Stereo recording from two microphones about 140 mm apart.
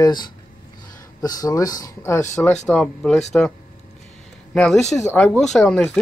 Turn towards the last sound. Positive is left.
turn(degrees=0)  # may be behind; listen again after turning